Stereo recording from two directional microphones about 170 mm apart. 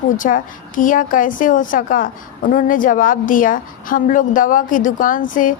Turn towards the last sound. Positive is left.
turn(degrees=55)  # may be behind; listen again after turning